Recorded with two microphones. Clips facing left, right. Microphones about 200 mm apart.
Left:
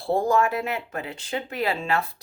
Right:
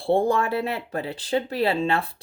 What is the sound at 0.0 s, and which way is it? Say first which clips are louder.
Speech: right 1 dB; 30° right (ahead or behind).